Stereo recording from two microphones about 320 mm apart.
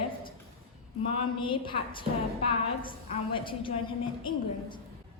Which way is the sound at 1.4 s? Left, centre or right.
Centre.